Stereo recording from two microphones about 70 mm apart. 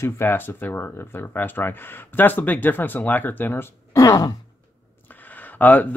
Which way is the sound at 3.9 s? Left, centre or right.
Left.